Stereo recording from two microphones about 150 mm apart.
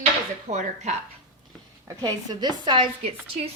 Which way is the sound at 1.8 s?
25° right (ahead or behind).